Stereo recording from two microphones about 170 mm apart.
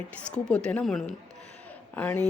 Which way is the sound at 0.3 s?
5° left (ahead or behind).